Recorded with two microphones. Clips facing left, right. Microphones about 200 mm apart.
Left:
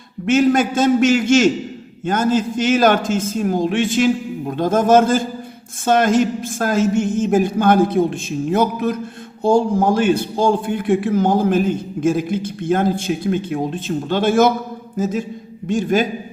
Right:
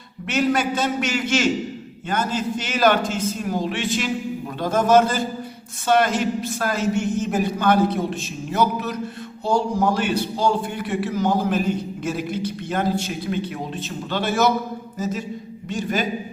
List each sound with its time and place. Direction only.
0.3 s a man's voice: 50° left (ahead or behind)